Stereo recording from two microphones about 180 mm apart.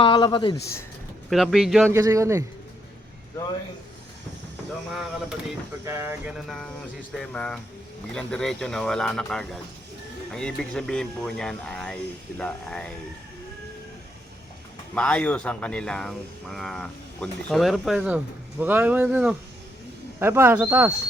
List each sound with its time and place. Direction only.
0.0 s speech: 25° left (ahead or behind)
1.3 s speech: centre (ahead or behind)
1.9 s speech: 20° right (ahead or behind)
4.9 s speech: centre (ahead or behind)
5.8 s speech: 15° right (ahead or behind)
6.3 s speech: centre (ahead or behind)
14.9 s speech: 5° left (ahead or behind); by 20.9 s 10° right (ahead or behind)